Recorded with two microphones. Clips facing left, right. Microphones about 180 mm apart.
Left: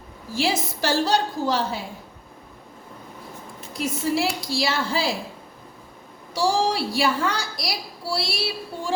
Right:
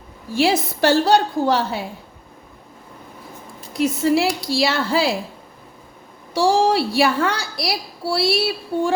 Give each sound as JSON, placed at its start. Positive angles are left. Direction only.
{"t": 0.3, "sound": "a woman's voice", "side_deg": -60}
{"t": 3.7, "sound": "a woman's voice", "side_deg": -65}
{"t": 6.3, "sound": "a woman's voice", "side_deg": -60}